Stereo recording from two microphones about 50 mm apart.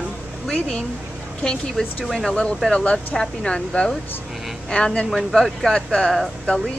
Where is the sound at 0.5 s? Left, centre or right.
Centre.